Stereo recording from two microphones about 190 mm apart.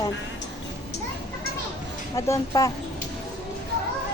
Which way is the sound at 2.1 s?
15° left (ahead or behind).